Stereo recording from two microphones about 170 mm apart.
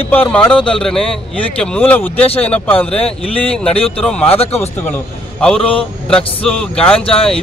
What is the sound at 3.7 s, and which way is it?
Speech, 35° left (ahead or behind).